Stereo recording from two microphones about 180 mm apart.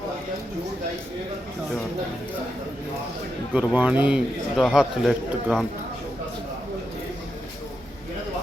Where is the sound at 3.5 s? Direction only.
10° right (ahead or behind).